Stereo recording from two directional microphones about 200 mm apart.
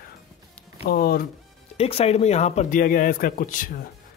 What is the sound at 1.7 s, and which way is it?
A man's voice, 30° left (ahead or behind).